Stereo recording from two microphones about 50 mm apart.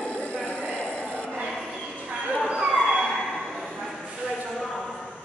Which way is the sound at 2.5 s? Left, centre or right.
Centre.